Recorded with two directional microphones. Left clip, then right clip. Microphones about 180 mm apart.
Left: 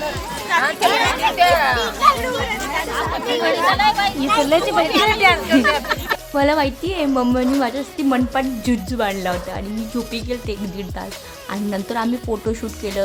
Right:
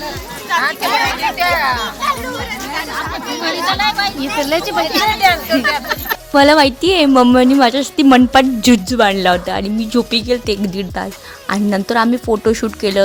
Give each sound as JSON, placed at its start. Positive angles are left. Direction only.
{"t": 0.5, "sound": "speech", "side_deg": -5}
{"t": 2.7, "sound": "music", "side_deg": -5}
{"t": 3.4, "sound": "speech", "side_deg": -10}
{"t": 6.3, "sound": "a woman's voice", "side_deg": -45}